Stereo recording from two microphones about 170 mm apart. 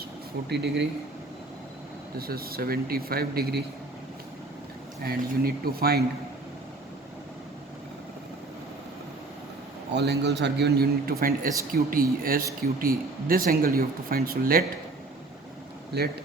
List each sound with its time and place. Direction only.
0.4 s speech: 85° right
2.1 s speech: 60° right (ahead or behind)
5.0 s speech: 60° right (ahead or behind)
9.9 s a man's voice: 80° right; by 14.6 s 60° right (ahead or behind)